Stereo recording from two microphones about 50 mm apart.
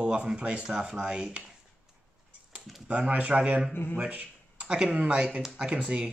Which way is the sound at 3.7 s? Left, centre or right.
Left.